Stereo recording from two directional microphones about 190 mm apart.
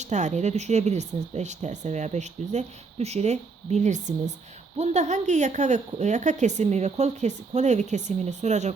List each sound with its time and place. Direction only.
0.0 s speech: 40° right (ahead or behind)